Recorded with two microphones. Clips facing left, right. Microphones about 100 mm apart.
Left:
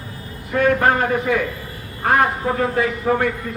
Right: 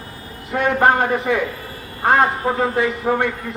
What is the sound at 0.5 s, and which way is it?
A man's voice, 25° right (ahead or behind).